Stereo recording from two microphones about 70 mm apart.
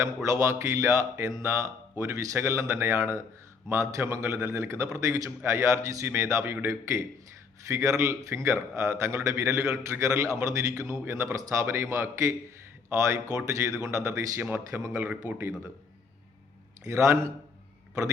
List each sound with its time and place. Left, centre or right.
0.3 s a man's voice: right
2.4 s a man's voice: right
10.2 s a man's voice: right
11.1 s a man's voice: right
12.9 s a man's voice: right
16.8 s a man's voice: right